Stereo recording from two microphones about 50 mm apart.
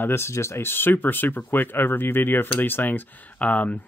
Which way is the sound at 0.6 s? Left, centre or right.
Left.